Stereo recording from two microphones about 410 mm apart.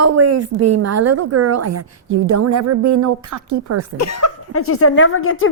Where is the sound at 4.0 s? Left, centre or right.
Left.